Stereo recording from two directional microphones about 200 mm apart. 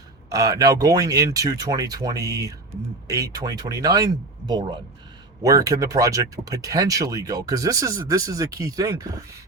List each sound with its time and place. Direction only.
0.3 s speech: 15° right (ahead or behind)